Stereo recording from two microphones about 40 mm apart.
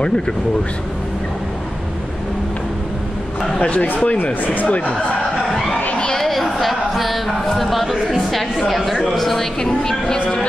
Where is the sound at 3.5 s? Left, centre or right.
Left.